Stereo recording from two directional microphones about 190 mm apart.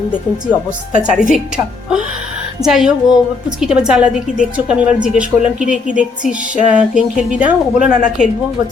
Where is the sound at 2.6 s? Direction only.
Centre (ahead or behind).